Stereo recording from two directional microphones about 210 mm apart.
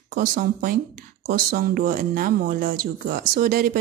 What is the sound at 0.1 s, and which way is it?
Speech, 40° right (ahead or behind).